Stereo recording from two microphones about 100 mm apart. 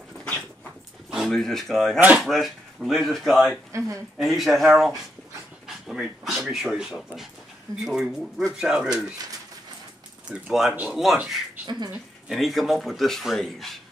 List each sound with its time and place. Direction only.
1.1 s speech: centre (ahead or behind)
3.7 s speech: 30° right (ahead or behind)
4.2 s speech: centre (ahead or behind)
6.2 s speech: centre (ahead or behind)
10.2 s speech: 5° right (ahead or behind)
11.0 s speech: 5° right (ahead or behind)